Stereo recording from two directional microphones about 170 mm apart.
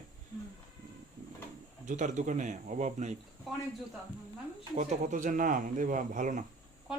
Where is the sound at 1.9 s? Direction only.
45° right (ahead or behind).